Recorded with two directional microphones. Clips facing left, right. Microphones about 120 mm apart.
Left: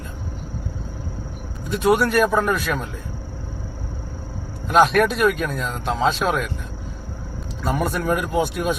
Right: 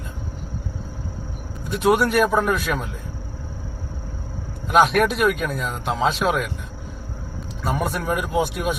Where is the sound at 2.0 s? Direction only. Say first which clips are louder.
Even; 10° right (ahead or behind).